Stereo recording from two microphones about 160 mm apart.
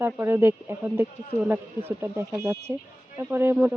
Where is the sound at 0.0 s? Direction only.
15° right (ahead or behind).